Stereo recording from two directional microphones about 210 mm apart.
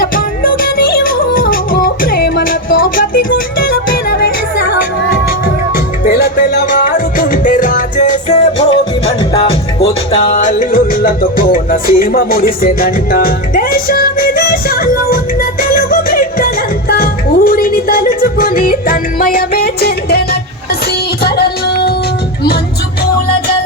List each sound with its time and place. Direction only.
0.0 s music: 45° left (ahead or behind)
6.1 s music: 50° left (ahead or behind)
9.0 s music: 25° left (ahead or behind); by 20.2 s 50° left (ahead or behind)